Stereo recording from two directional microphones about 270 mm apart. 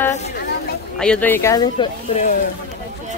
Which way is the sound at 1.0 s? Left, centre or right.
Centre.